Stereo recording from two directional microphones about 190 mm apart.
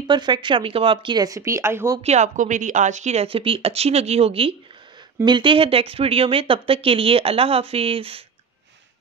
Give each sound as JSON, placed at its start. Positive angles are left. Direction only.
{"t": 0.0, "sound": "speech", "side_deg": -20}
{"t": 2.0, "sound": "speech", "side_deg": -40}